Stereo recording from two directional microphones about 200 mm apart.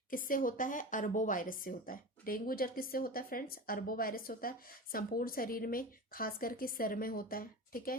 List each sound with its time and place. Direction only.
0.1 s speech: 45° left (ahead or behind)